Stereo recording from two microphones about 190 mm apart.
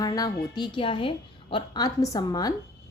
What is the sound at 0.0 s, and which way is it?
A woman's voice, 20° left (ahead or behind).